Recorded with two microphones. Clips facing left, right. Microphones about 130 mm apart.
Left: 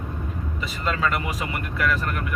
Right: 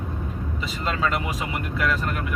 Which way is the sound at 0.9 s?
25° right (ahead or behind).